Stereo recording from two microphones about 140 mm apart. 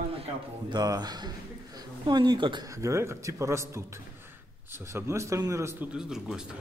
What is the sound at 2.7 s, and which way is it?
A man's voice, 20° right (ahead or behind).